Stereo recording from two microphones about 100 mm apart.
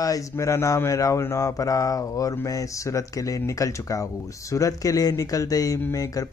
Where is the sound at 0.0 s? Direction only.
35° left (ahead or behind).